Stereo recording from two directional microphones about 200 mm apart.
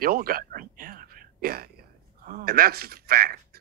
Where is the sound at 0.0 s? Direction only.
45° right (ahead or behind).